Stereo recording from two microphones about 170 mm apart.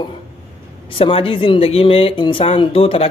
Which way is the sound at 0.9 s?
30° left (ahead or behind).